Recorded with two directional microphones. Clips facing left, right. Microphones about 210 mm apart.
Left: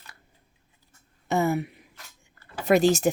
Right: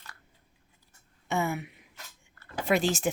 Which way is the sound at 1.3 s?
35° left (ahead or behind).